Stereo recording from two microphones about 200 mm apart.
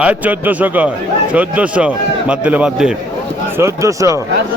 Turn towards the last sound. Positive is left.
turn(degrees=-15)  # may be behind; listen again after turning